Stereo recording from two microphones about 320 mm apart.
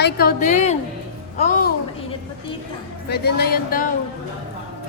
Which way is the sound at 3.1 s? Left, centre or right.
Left.